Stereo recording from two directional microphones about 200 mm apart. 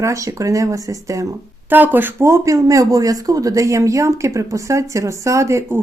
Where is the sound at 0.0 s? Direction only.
15° right (ahead or behind).